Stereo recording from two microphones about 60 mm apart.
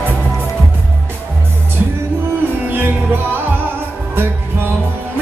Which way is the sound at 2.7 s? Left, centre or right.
Right.